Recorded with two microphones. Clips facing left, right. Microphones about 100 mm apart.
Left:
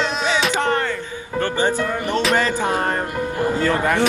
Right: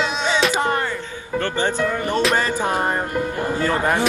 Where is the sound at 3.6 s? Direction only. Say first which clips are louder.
Right 1 dB; 30° right (ahead or behind).